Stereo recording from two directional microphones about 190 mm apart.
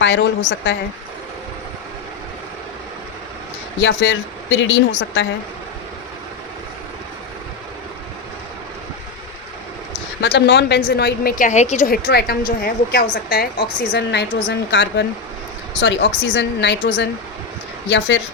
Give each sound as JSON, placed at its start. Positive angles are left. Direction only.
{"t": 0.0, "sound": "a woman's voice", "side_deg": 70}
{"t": 3.8, "sound": "a woman's voice", "side_deg": 75}
{"t": 10.2, "sound": "a woman's voice", "side_deg": 65}
{"t": 11.9, "sound": "a woman's voice", "side_deg": 55}